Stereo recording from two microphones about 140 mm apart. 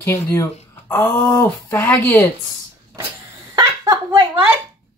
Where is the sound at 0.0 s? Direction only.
20° left (ahead or behind).